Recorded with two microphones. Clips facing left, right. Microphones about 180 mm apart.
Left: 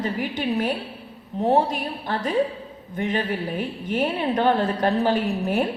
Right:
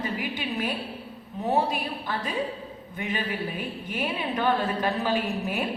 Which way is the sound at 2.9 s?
45° left (ahead or behind).